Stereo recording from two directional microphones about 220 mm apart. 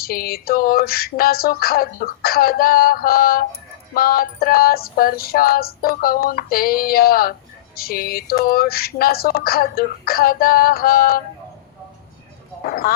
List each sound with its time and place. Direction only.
0.0 s music: 45° left (ahead or behind)
12.6 s speech: 45° left (ahead or behind)